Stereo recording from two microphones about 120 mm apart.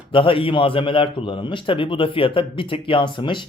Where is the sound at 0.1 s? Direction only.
45° left (ahead or behind).